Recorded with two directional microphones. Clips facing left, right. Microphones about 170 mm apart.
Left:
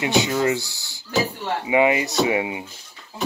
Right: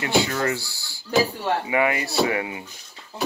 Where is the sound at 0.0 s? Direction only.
20° left (ahead or behind).